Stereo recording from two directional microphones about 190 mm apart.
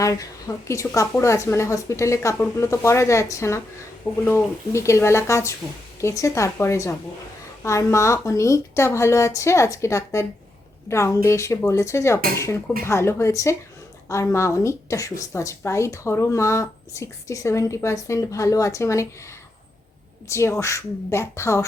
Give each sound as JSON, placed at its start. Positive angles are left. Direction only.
{"t": 0.0, "sound": "a woman's voice", "side_deg": 15}
{"t": 20.2, "sound": "a woman's voice", "side_deg": 15}